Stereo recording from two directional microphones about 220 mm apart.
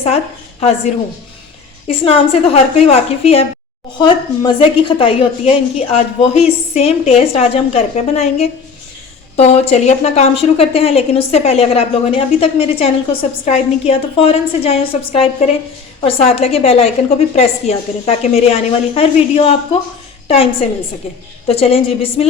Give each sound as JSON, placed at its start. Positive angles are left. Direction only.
{"t": 1.9, "sound": "a woman's voice", "side_deg": 25}